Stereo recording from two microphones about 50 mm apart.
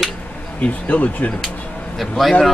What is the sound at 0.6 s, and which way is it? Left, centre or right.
Speech, left.